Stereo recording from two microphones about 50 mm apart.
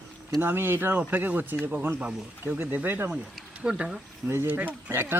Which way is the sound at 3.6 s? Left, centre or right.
Centre.